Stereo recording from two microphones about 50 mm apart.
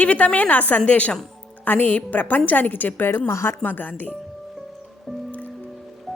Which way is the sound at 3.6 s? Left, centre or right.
Left.